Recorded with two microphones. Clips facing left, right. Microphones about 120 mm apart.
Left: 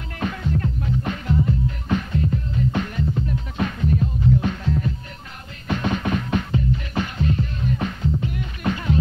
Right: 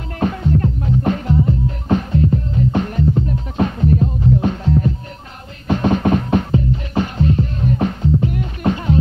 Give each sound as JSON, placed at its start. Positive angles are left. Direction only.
{"t": 0.2, "sound": "music", "side_deg": -35}